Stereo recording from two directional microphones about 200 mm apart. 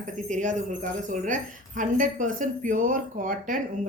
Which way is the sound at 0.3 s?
40° right (ahead or behind).